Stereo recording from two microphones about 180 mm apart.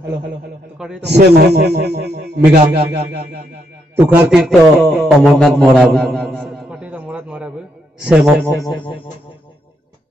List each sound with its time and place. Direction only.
0.7 s a man's voice: 5° right (ahead or behind)
1.1 s a man's voice: 65° right (ahead or behind)
3.9 s a man's voice: 10° right (ahead or behind)
8.5 s speech: 20° left (ahead or behind)